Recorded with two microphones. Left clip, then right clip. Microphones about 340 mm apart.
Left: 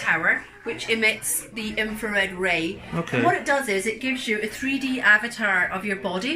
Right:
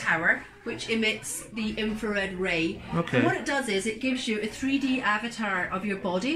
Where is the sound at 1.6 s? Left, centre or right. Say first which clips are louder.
Left 4 dB; centre.